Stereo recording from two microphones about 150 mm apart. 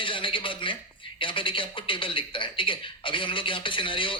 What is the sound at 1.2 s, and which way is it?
A man's voice, 35° left (ahead or behind).